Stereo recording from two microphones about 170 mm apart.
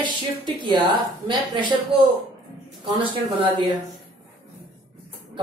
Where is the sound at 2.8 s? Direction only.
30° right (ahead or behind).